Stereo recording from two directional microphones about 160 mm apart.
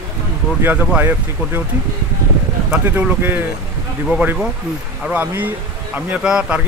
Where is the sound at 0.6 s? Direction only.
15° right (ahead or behind).